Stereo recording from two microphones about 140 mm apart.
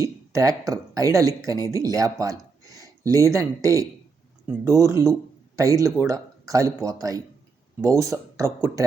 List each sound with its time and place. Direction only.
0.0 s speech: 25° right (ahead or behind)